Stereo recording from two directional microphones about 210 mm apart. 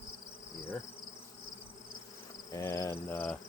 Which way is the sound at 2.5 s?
15° left (ahead or behind).